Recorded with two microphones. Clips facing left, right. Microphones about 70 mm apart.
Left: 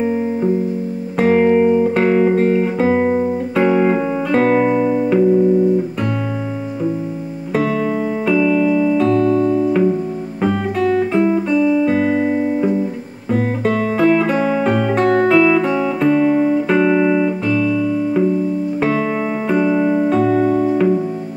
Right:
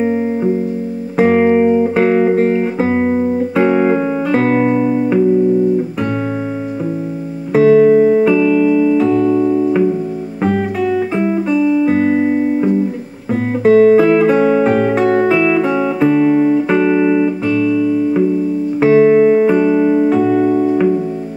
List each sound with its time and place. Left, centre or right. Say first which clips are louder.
0.0 s music: right 2 dB; centre
1.1 s music: right 2 dB; centre
7.5 s music: right 10 dB; centre